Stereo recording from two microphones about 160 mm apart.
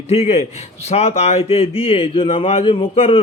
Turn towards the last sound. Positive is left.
turn(degrees=35)  # may be behind; listen again after turning